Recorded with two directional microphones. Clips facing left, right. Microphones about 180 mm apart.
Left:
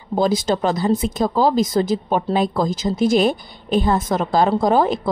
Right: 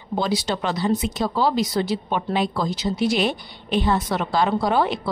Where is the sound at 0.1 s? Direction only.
50° left (ahead or behind).